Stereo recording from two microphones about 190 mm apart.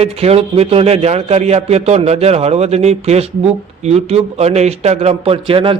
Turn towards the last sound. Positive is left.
turn(degrees=-30)  # may be behind; listen again after turning